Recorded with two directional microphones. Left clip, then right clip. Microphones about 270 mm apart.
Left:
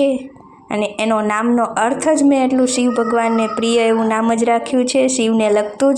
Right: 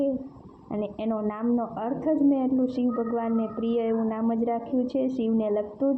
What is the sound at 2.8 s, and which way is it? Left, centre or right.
Speech, left.